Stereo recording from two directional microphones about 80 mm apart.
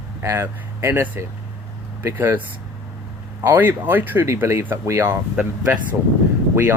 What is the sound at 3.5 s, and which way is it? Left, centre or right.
Speech, right.